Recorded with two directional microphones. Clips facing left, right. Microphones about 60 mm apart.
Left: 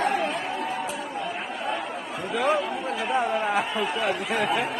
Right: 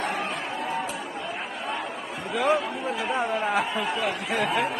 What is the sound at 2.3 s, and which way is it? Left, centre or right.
Speech, centre.